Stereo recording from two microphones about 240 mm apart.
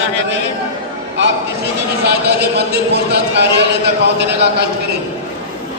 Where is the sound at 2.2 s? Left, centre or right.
Right.